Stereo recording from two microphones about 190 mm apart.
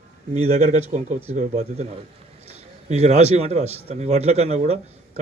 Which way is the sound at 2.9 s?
35° right (ahead or behind).